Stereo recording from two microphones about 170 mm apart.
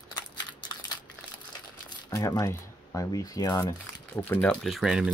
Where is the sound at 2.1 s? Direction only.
20° left (ahead or behind).